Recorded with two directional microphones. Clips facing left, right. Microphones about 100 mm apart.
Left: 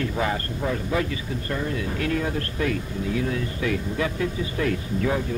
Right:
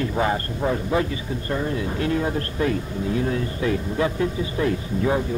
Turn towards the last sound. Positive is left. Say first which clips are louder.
# right 2 dB
turn(degrees=-25)  # may be behind; listen again after turning